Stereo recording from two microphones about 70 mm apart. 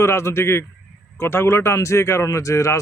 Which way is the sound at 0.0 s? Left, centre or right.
Left.